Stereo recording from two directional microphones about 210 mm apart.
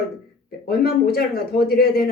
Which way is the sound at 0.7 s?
45° left (ahead or behind).